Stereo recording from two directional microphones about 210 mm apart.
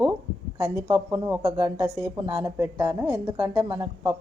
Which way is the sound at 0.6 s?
15° right (ahead or behind).